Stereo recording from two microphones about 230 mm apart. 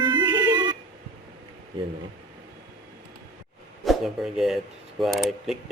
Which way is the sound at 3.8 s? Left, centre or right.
Centre.